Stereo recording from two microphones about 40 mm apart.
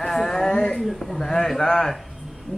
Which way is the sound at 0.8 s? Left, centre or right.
Centre.